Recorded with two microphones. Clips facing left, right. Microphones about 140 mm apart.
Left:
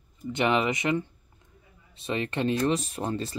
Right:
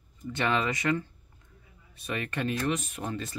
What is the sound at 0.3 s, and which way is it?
Speech, 20° left (ahead or behind).